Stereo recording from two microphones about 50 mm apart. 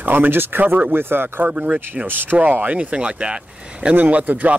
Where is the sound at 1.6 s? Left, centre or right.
Right.